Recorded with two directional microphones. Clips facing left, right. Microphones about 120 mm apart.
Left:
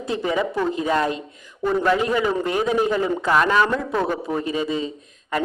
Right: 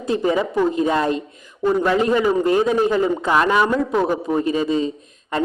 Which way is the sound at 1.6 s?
10° right (ahead or behind).